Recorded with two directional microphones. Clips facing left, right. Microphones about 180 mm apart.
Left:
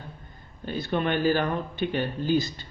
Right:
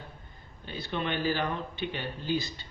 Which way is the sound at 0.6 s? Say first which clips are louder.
Left 7 dB; 50° left (ahead or behind).